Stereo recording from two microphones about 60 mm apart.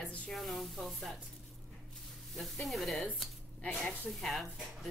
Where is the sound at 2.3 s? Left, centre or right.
Centre.